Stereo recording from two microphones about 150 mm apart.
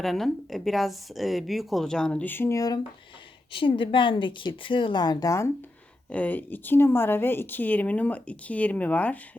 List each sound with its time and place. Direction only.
0.0 s a woman's voice: centre (ahead or behind); by 2.8 s 25° left (ahead or behind)
3.5 s speech: 35° left (ahead or behind)
6.1 s speech: 10° left (ahead or behind)